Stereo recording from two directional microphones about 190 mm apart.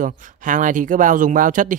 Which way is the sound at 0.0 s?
40° right (ahead or behind).